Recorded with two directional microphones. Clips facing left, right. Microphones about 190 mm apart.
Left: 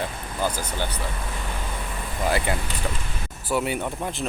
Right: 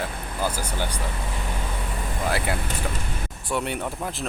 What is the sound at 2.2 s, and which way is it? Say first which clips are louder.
Speech: left 2 dB; centre (ahead or behind).